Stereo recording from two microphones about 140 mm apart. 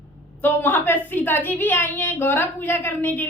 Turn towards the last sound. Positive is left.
turn(degrees=15)  # may be behind; listen again after turning